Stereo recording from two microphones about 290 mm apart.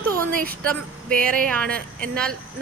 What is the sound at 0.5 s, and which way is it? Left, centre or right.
A woman's voice, centre.